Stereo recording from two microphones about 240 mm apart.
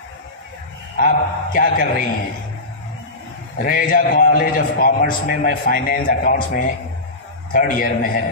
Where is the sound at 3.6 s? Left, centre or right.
Left.